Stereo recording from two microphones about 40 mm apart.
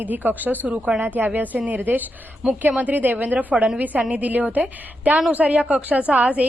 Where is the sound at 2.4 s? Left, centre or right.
Centre.